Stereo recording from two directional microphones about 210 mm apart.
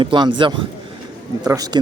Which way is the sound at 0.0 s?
25° right (ahead or behind).